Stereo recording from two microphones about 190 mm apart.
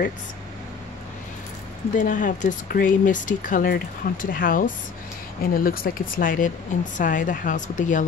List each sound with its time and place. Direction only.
2.0 s speech: 45° left (ahead or behind)